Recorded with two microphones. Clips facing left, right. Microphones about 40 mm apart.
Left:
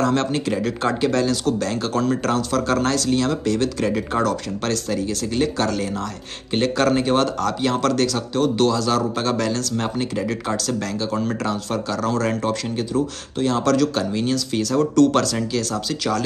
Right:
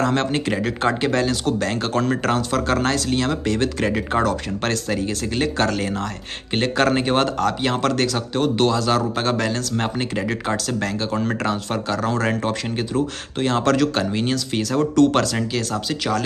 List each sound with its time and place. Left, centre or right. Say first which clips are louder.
0.0 s speech: even; right
6.5 s speech: even; right
13.4 s speech: even; right
14.6 s speech: even; centre